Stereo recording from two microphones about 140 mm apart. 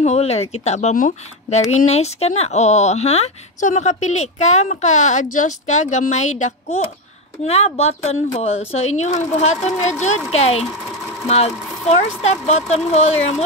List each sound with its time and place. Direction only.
0.0 s speech: 50° left (ahead or behind)
0.9 s speech: 70° left (ahead or behind)
1.9 s speech: 50° left (ahead or behind)